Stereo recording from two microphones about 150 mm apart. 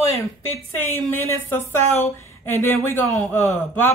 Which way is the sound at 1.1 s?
15° left (ahead or behind).